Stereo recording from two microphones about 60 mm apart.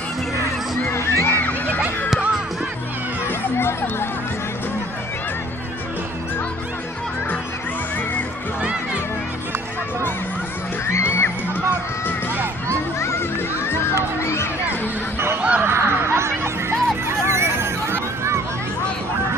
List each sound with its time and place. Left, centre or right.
0.9 s crowd: left
3.2 s music: left
10.8 s music: left
13.0 s children playing: left
13.9 s a sound: left
15.4 s a sound: right
15.6 s music: right